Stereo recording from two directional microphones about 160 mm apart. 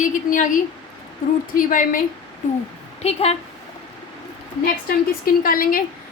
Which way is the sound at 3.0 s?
40° left (ahead or behind).